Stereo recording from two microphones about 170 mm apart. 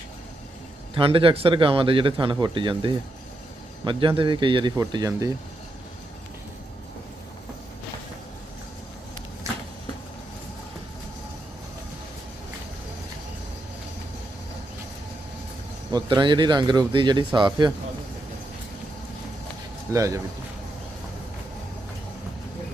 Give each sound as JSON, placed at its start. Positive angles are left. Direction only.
{"t": 0.9, "sound": "speech", "side_deg": -30}
{"t": 15.9, "sound": "speech", "side_deg": -25}
{"t": 19.9, "sound": "speech", "side_deg": -20}